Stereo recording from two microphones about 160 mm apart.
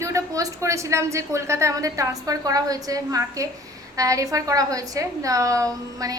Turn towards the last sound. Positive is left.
turn(degrees=-20)  # may be behind; listen again after turning